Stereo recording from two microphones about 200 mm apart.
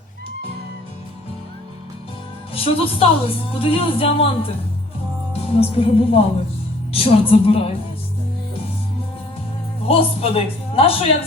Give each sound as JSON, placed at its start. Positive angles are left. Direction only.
{"t": 2.6, "sound": "a woman's voice", "side_deg": 30}
{"t": 9.8, "sound": "a woman's voice", "side_deg": 30}